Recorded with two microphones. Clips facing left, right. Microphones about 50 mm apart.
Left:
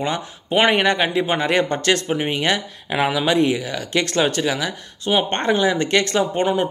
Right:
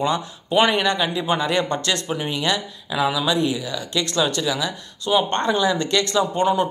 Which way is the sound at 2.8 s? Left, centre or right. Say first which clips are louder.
Left 2 dB; left.